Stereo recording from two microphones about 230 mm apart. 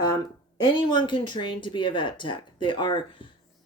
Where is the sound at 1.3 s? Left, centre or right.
Centre.